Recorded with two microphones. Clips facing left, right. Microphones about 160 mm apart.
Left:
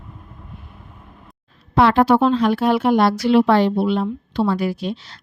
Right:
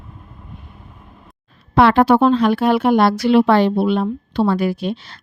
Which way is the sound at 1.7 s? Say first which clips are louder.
Right 2 dB; 65° right (ahead or behind).